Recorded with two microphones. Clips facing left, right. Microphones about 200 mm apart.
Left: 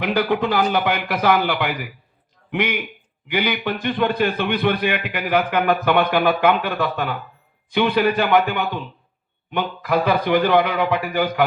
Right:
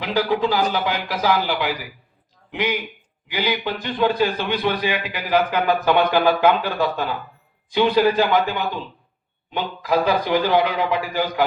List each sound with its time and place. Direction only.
0.0 s a man's voice: 60° left (ahead or behind)